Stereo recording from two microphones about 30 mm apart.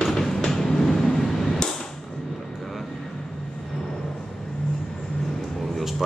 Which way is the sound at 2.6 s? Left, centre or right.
Centre.